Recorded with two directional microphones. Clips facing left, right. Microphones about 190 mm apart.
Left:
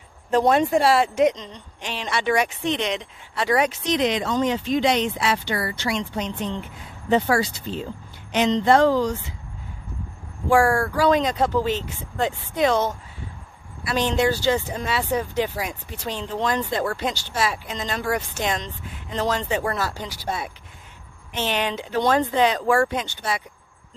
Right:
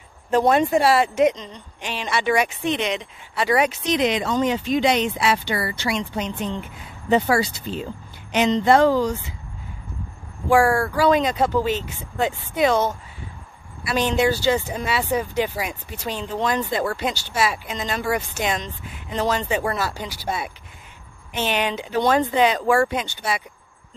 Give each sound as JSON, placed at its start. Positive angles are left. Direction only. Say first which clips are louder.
{"t": 0.3, "sound": "a woman's voice", "louder": "right 1 dB", "side_deg": -5}
{"t": 10.5, "sound": "a woman's voice", "louder": "right 1 dB", "side_deg": -5}